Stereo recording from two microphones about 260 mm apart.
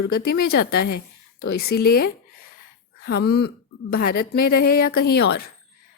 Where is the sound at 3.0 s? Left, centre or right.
Left.